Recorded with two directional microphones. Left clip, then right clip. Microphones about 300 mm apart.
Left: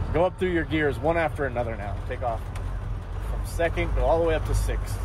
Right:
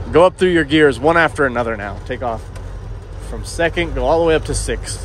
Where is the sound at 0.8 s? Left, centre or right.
Right.